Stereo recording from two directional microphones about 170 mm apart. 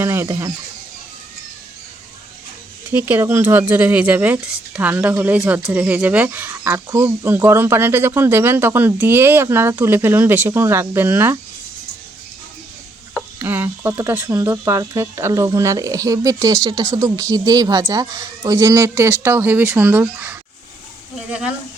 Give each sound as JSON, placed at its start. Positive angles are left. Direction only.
{"t": 0.0, "sound": "speech", "side_deg": -15}
{"t": 2.9, "sound": "speech", "side_deg": -15}
{"t": 13.4, "sound": "speech", "side_deg": -10}